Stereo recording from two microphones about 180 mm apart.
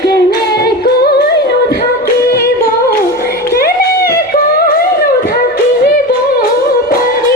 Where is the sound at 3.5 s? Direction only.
60° left (ahead or behind).